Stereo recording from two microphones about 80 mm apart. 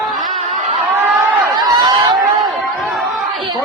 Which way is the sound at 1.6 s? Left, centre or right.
Right.